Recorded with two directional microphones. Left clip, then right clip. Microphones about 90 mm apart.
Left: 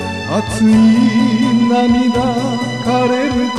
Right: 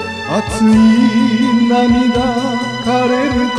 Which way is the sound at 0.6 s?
15° right (ahead or behind).